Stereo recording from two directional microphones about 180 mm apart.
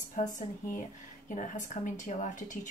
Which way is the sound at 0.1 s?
45° left (ahead or behind).